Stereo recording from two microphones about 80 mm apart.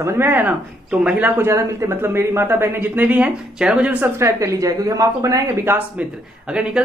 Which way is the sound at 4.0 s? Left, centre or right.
Right.